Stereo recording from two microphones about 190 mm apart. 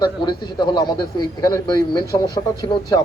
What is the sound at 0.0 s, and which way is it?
A man's voice, 20° left (ahead or behind).